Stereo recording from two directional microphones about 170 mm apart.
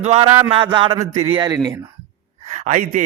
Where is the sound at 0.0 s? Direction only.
40° right (ahead or behind).